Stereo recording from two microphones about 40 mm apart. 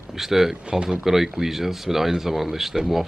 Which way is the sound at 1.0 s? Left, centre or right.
Centre.